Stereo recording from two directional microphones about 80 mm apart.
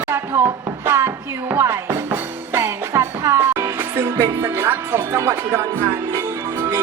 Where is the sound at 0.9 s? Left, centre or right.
Right.